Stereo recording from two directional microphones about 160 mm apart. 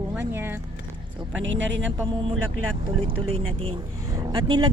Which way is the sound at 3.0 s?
35° right (ahead or behind).